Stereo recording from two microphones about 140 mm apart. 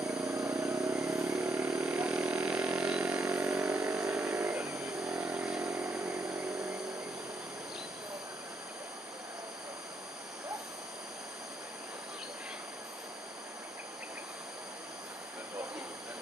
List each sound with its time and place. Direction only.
0.2 s vehicle: 20° right (ahead or behind)
1.5 s vehicle: 5° right (ahead or behind)
4.0 s vehicle: 20° right (ahead or behind)
4.3 s vehicle: 10° right (ahead or behind)